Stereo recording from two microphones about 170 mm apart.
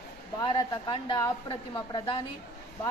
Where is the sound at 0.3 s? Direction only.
20° left (ahead or behind).